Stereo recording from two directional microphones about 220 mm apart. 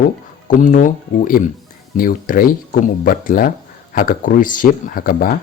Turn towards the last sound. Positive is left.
turn(degrees=40)  # may be behind; listen again after turning